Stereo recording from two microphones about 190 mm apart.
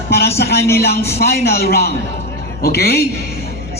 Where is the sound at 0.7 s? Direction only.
55° left (ahead or behind).